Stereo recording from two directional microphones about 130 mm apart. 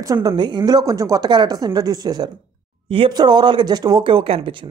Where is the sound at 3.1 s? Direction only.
35° right (ahead or behind).